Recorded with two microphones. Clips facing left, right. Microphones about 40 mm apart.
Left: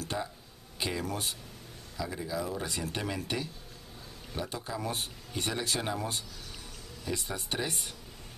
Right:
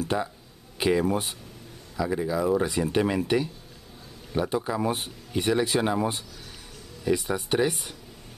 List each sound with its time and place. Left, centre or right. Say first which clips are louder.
0.0 s speech: right 8 dB; centre
4.4 s speech: right 10 dB; right